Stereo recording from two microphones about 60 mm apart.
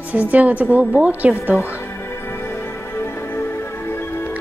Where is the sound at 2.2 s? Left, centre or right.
Left.